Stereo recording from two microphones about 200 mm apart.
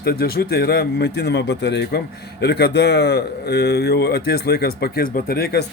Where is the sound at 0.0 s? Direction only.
50° left (ahead or behind).